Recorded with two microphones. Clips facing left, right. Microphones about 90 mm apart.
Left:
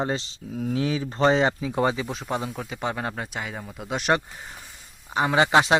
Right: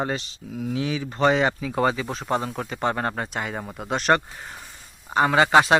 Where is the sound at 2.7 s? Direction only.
5° left (ahead or behind).